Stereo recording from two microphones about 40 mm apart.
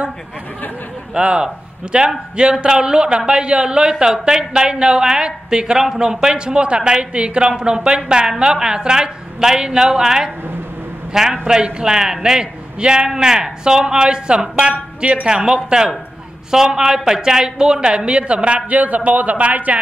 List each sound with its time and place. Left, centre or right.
1.1 s a woman's voice: right
11.4 s a woman's voice: right